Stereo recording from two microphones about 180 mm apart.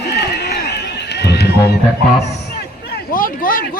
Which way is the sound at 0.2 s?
65° left (ahead or behind).